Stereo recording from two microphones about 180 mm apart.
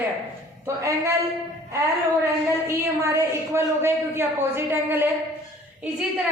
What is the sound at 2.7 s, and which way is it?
Speech, 15° right (ahead or behind).